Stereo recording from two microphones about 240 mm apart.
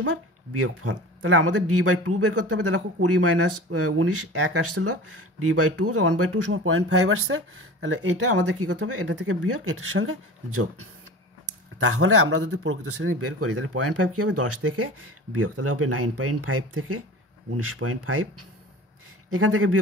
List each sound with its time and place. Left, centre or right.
0.1 s speech: right